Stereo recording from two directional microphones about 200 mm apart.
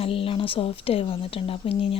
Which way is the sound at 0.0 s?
30° left (ahead or behind).